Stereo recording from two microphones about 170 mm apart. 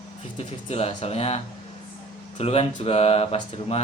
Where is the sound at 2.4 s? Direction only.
35° left (ahead or behind).